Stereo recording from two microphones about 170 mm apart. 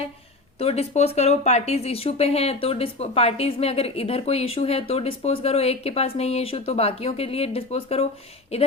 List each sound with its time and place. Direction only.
0.6 s speech: 35° left (ahead or behind)